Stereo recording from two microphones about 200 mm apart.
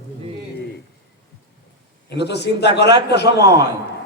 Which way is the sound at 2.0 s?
55° left (ahead or behind).